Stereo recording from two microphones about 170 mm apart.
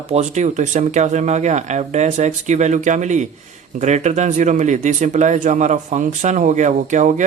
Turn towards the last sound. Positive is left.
turn(degrees=-45)  # may be behind; listen again after turning